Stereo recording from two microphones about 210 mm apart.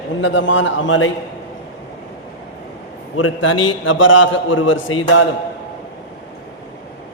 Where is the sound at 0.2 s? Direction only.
65° left (ahead or behind).